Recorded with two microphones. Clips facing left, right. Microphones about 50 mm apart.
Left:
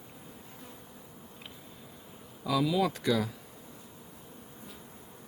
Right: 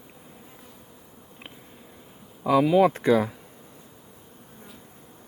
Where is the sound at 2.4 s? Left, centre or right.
Right.